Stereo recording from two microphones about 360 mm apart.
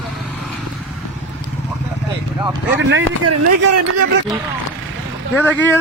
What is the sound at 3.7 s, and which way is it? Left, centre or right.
Speech, right.